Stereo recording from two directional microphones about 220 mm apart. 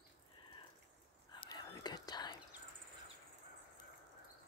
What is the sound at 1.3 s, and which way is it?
Whispering, 20° left (ahead or behind).